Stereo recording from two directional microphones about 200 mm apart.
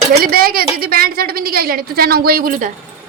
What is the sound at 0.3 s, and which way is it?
A woman's voice, 45° right (ahead or behind).